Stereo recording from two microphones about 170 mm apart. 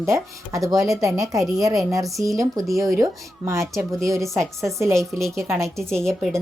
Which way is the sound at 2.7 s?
Centre (ahead or behind).